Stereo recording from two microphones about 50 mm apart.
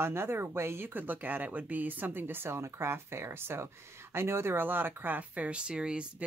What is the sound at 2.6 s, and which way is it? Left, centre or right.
Speech, right.